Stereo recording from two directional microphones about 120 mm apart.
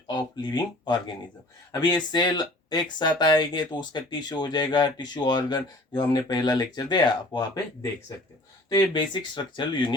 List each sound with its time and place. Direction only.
0.1 s speech: 35° left (ahead or behind)
2.1 s speech: 35° left (ahead or behind)